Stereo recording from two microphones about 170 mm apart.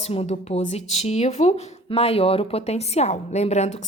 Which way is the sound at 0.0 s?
35° left (ahead or behind).